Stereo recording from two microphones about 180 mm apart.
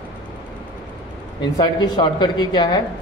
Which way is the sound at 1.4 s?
25° left (ahead or behind).